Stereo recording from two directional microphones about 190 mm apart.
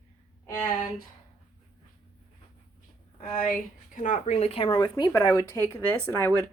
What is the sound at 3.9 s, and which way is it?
Speech, 40° left (ahead or behind).